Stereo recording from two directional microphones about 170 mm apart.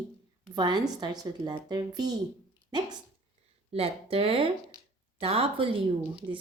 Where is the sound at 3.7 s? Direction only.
35° right (ahead or behind).